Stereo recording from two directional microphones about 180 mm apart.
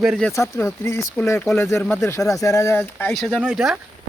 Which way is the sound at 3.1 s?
Centre (ahead or behind).